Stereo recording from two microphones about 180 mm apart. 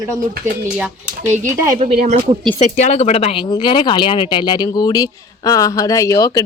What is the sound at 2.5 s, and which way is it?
Speech, 40° left (ahead or behind).